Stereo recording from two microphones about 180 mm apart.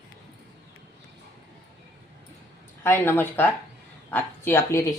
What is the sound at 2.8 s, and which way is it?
Speech, 15° left (ahead or behind).